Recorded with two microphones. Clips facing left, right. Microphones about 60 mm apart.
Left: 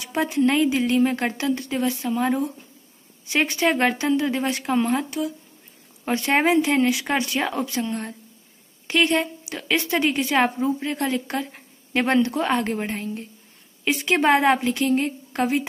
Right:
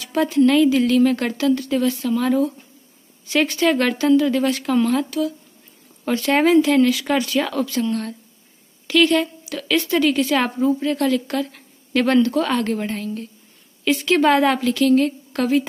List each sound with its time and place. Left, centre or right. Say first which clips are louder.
0.0 s a woman's voice: right 4 dB; left